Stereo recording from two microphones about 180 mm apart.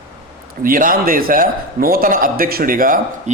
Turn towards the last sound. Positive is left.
turn(degrees=-50)  # may be behind; listen again after turning